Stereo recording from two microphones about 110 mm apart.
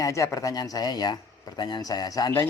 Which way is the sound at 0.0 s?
30° left (ahead or behind).